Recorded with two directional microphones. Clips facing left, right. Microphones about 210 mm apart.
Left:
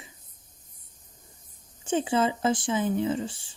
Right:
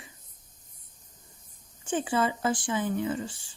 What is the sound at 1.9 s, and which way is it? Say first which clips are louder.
Speech: left 3 dB; 20° left (ahead or behind).